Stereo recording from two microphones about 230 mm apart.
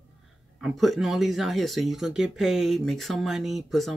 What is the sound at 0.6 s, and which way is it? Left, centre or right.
Speech, centre.